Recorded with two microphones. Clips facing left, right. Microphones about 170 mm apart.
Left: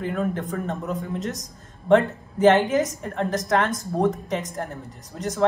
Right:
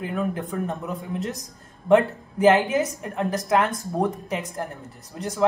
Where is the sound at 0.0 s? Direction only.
5° right (ahead or behind).